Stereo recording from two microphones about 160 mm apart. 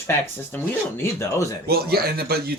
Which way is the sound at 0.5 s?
10° left (ahead or behind).